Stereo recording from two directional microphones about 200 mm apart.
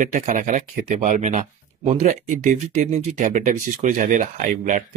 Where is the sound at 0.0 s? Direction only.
40° right (ahead or behind).